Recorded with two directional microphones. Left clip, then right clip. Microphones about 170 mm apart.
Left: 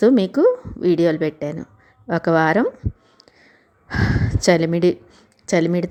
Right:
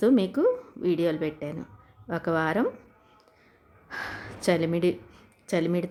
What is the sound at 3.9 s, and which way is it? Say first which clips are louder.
A woman's voice: left 11 dB; 40° left (ahead or behind).